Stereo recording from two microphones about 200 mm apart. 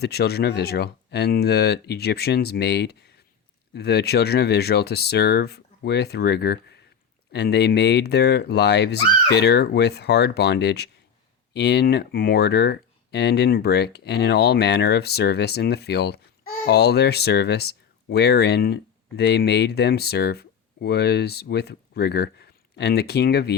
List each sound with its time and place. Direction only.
0.0 s speech: 55° left (ahead or behind)